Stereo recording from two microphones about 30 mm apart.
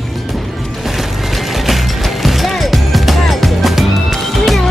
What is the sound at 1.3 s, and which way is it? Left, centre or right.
Music, centre.